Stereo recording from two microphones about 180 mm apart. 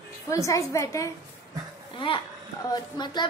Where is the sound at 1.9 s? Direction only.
30° left (ahead or behind).